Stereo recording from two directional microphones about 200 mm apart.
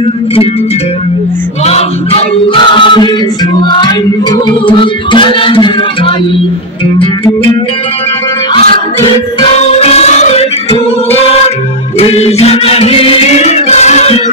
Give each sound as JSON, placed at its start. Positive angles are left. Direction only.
{"t": 1.7, "sound": "music", "side_deg": 30}
{"t": 9.0, "sound": "music", "side_deg": 30}
{"t": 12.0, "sound": "music", "side_deg": 30}